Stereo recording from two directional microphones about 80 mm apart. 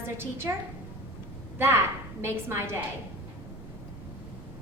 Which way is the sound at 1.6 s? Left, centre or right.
Right.